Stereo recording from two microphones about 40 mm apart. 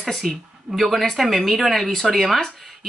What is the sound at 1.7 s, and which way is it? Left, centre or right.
Speech, centre.